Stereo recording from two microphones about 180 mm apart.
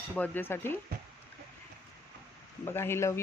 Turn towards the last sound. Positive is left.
turn(degrees=15)  # may be behind; listen again after turning